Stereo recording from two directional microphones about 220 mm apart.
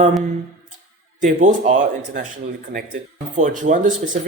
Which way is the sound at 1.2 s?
35° right (ahead or behind).